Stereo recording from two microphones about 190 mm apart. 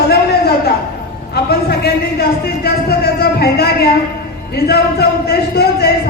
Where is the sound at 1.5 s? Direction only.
55° left (ahead or behind).